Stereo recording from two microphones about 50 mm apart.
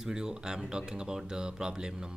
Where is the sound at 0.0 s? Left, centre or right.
Centre.